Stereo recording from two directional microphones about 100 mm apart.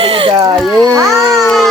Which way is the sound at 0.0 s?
70° right (ahead or behind).